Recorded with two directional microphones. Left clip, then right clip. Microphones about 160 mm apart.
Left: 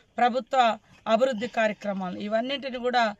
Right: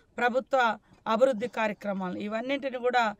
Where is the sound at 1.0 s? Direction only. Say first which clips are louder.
Left 1 dB; 25° right (ahead or behind).